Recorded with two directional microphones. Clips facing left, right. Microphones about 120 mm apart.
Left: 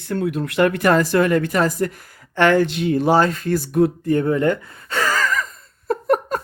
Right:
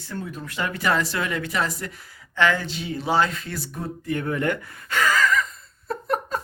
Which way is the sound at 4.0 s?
35° left (ahead or behind).